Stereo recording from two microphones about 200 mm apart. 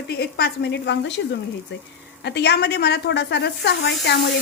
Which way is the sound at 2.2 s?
55° left (ahead or behind).